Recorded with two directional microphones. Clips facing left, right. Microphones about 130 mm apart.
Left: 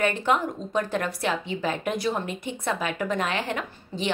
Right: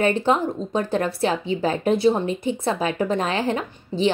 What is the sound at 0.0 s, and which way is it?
Speech, 30° right (ahead or behind).